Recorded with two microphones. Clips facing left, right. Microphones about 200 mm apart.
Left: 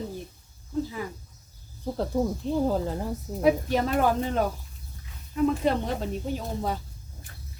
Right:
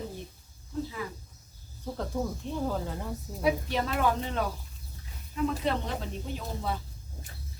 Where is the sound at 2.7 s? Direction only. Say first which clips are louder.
Left 6 dB; 35° left (ahead or behind).